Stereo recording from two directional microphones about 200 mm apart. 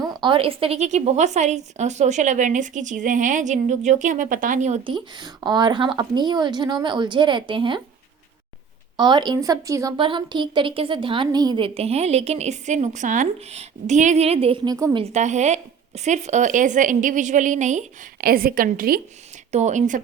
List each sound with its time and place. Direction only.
0.0 s a woman's voice: 20° right (ahead or behind)
9.0 s speech: 20° right (ahead or behind)
15.0 s a woman's voice: 35° right (ahead or behind)
19.5 s a woman's voice: 35° right (ahead or behind)